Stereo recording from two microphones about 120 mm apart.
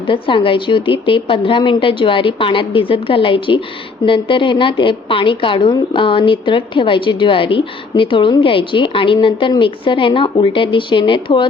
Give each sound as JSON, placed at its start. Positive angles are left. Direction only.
{"t": 0.1, "sound": "a woman's voice", "side_deg": 45}